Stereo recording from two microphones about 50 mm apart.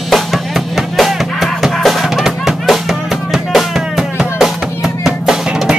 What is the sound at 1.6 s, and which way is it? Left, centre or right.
Music, centre.